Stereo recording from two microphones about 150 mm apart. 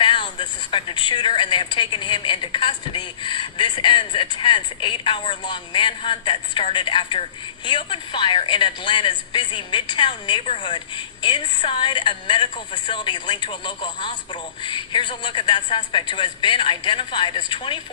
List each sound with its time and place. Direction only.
0.0 s a woman's voice: 30° left (ahead or behind)